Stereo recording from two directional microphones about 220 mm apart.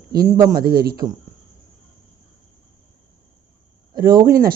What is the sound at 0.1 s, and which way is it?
Speech, 45° right (ahead or behind).